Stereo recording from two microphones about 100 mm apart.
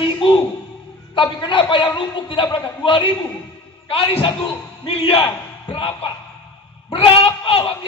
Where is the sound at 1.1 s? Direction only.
55° left (ahead or behind).